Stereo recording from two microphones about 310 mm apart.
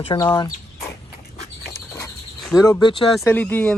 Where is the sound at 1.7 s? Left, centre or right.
Centre.